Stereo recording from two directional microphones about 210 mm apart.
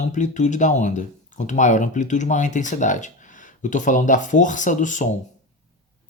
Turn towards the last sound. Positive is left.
turn(degrees=35)  # may be behind; listen again after turning